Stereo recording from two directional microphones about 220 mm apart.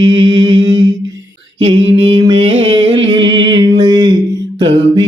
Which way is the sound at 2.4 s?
60° right (ahead or behind).